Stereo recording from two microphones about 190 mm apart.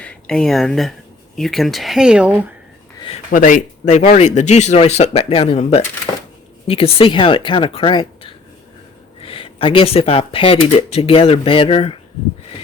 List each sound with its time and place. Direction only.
0.0 s speech: 5° left (ahead or behind)
3.3 s speech: 45° left (ahead or behind)